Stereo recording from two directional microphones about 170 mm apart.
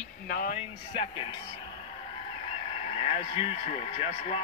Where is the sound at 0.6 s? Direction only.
30° left (ahead or behind).